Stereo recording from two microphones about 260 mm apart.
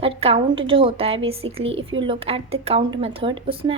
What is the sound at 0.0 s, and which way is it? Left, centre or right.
A woman's voice, right.